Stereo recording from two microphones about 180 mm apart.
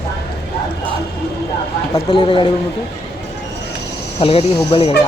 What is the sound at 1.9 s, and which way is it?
Speech, 25° left (ahead or behind).